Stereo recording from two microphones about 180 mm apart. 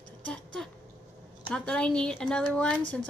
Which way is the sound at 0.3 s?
5° left (ahead or behind).